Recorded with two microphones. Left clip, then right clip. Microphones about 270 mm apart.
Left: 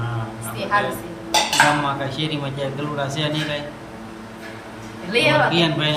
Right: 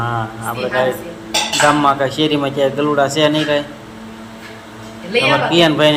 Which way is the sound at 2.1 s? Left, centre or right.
Centre.